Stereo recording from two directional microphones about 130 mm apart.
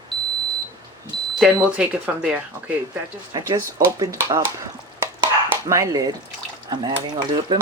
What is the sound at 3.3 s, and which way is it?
Speech, 25° right (ahead or behind).